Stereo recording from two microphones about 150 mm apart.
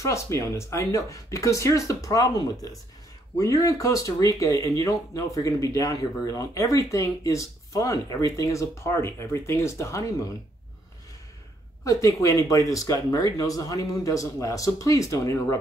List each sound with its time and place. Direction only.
0.0 s speech: 20° left (ahead or behind)
11.8 s speech: 20° left (ahead or behind)